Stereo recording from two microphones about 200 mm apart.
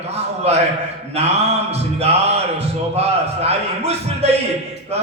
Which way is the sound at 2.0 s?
30° right (ahead or behind).